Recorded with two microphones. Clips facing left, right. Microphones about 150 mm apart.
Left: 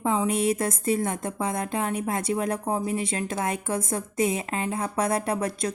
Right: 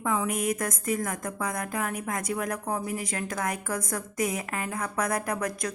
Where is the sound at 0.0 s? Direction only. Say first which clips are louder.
Left 4 dB; 25° left (ahead or behind).